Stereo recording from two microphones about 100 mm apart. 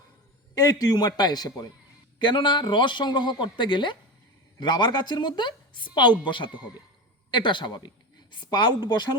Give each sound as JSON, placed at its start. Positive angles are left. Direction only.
{"t": 0.5, "sound": "a woman's voice", "side_deg": 40}